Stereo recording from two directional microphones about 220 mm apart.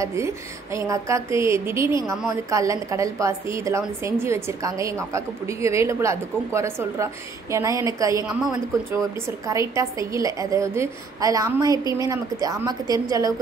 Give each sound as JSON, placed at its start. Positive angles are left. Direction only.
{"t": 0.0, "sound": "a woman's voice", "side_deg": -15}
{"t": 9.5, "sound": "a woman's voice", "side_deg": -15}